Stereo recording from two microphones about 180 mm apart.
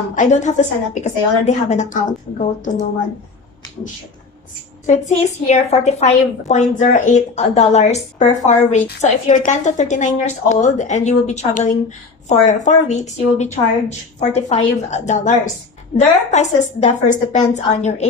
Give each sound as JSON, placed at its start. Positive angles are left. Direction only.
{"t": 0.1, "sound": "a woman's voice", "side_deg": 45}
{"t": 4.8, "sound": "a woman's voice", "side_deg": 40}